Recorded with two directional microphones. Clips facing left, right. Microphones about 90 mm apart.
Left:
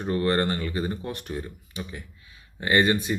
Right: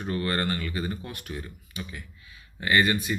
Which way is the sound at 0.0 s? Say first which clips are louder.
Left 4 dB; 30° left (ahead or behind).